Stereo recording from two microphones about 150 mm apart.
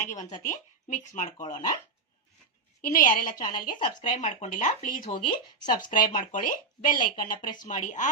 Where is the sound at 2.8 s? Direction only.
60° left (ahead or behind).